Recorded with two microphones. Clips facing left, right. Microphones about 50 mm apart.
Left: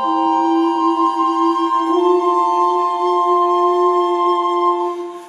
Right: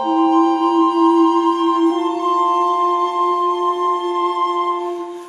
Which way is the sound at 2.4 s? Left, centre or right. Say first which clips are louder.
Left 1 dB; right.